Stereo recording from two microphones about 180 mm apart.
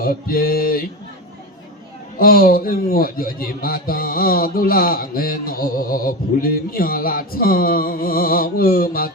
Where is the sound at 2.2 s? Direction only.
55° left (ahead or behind).